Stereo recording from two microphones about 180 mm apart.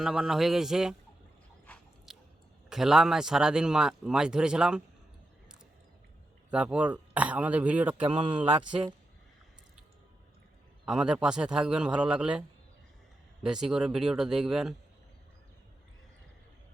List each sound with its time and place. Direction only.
0.0 s speech: centre (ahead or behind)
1.6 s biting: 5° left (ahead or behind)
2.6 s speech: 5° right (ahead or behind)
6.5 s speech: 5° right (ahead or behind)
10.8 s speech: 5° right (ahead or behind)